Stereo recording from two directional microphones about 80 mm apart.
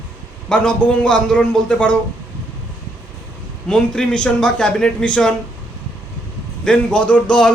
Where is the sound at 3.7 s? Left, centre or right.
Centre.